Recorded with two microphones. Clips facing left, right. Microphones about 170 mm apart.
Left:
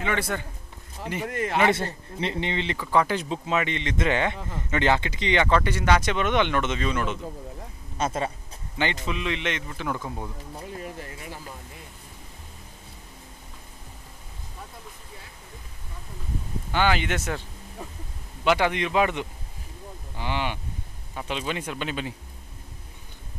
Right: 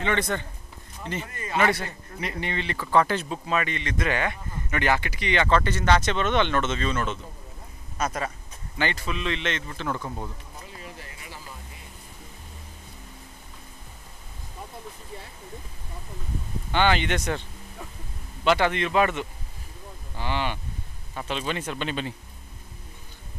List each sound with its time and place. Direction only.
0.0 s speech: 5° left (ahead or behind)
1.2 s speech: 70° left (ahead or behind)
1.6 s speech: 25° left (ahead or behind)
8.0 s speech: 25° left (ahead or behind); by 10.3 s 10° left (ahead or behind)
10.8 s a sound: 50° left (ahead or behind)
16.7 s speech: 5° left (ahead or behind)
17.8 s a sound: 25° left (ahead or behind)
18.4 s speech: 10° left (ahead or behind)